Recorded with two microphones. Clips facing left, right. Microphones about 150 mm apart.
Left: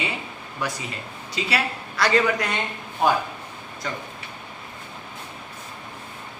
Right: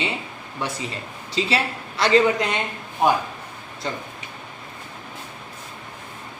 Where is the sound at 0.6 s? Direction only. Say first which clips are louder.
Right 1 dB; 25° right (ahead or behind).